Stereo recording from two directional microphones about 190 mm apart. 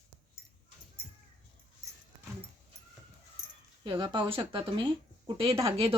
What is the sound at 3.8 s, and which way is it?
Speech, 25° right (ahead or behind).